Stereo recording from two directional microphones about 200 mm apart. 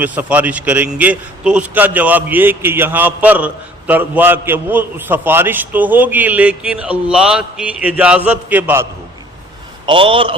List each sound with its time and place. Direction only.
0.0 s a man's voice: 10° right (ahead or behind)
9.8 s a man's voice: 25° right (ahead or behind)